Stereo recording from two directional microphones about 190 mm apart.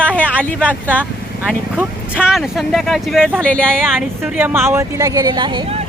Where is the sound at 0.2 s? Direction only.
5° left (ahead or behind).